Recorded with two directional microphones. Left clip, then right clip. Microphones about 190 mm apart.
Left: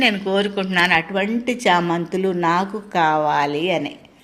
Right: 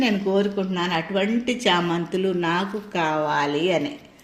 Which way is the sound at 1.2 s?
15° left (ahead or behind).